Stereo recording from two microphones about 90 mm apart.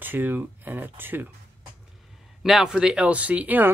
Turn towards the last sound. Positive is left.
turn(degrees=-20)  # may be behind; listen again after turning